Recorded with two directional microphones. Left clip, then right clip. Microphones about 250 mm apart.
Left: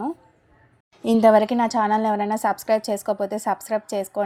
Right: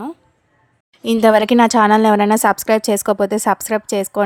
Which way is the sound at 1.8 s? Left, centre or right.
Right.